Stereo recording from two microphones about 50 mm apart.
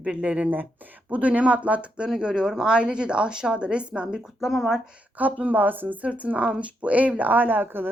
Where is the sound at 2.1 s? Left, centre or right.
Centre.